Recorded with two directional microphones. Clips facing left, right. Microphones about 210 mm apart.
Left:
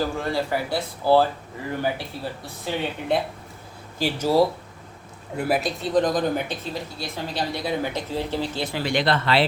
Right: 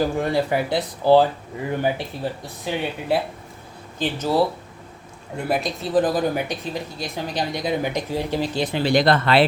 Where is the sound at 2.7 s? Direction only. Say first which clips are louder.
Right 1 dB; 15° right (ahead or behind).